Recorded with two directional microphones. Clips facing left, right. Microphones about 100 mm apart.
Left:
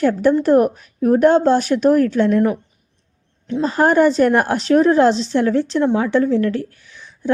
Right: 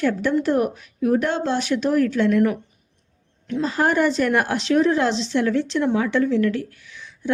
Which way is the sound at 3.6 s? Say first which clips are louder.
Left 6 dB; 40° left (ahead or behind).